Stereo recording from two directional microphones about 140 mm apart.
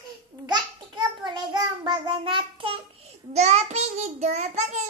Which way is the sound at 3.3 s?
55° right (ahead or behind).